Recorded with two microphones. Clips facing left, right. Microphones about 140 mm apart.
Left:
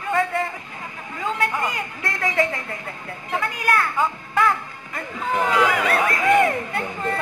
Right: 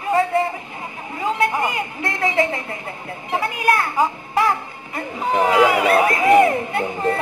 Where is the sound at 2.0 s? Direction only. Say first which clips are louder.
Right 3 dB; 25° right (ahead or behind).